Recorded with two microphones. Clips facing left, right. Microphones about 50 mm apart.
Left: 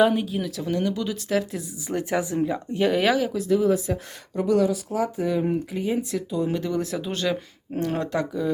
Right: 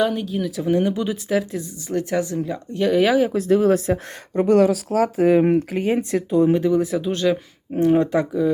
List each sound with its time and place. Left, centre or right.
0.0 s speech: centre
0.5 s speech: centre
1.3 s speech: centre
1.9 s speech: centre
3.3 s speech: right
6.4 s speech: right
6.7 s speech: centre
7.7 s speech: centre